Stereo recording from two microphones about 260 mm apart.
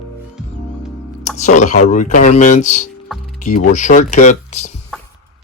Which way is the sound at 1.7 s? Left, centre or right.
Left.